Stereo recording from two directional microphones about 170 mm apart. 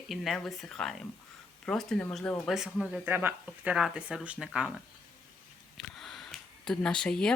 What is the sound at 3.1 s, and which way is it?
Speech, 10° right (ahead or behind).